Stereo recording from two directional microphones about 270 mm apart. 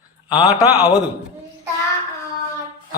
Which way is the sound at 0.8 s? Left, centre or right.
Centre.